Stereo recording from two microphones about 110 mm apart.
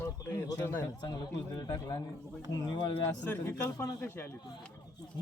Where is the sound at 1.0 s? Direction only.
40° left (ahead or behind).